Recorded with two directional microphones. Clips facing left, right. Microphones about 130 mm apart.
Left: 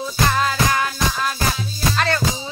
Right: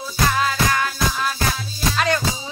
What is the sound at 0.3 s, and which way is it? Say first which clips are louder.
Music: even; centre (ahead or behind).